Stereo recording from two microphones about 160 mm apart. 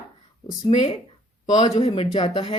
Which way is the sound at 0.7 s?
40° left (ahead or behind).